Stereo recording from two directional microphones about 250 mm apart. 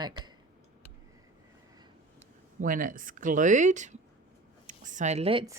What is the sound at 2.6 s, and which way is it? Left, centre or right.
Speech, right.